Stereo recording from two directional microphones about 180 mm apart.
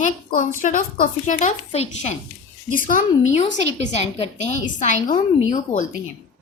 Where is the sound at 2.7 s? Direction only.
50° left (ahead or behind).